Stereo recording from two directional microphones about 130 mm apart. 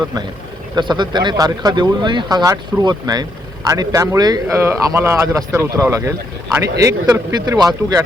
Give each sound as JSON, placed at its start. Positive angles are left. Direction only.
{"t": 0.8, "sound": "speech", "side_deg": -35}